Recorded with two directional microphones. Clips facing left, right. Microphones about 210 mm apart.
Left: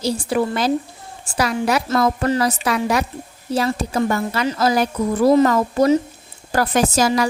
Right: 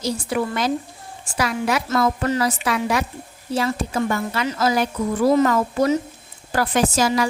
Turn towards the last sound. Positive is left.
turn(degrees=40)  # may be behind; listen again after turning